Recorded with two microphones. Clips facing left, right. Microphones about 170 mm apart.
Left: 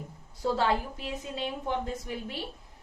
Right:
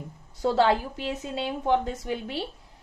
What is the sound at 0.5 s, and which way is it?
A woman's voice, 80° right.